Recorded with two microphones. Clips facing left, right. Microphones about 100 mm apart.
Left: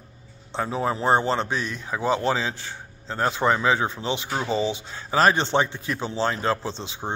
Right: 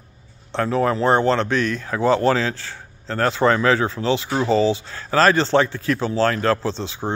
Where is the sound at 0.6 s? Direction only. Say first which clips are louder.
Right 6 dB; 15° left (ahead or behind).